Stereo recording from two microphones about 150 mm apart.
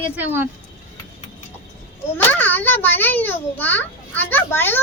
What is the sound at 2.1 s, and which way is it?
A child's voice, 10° left (ahead or behind).